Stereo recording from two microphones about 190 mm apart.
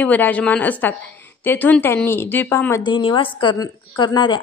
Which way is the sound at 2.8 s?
25° left (ahead or behind).